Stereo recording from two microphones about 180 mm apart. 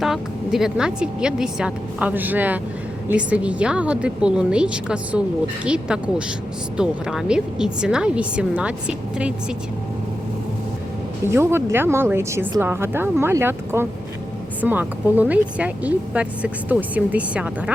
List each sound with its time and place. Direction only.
0.0 s a woman's voice: centre (ahead or behind)
11.3 s a woman's voice: 15° right (ahead or behind)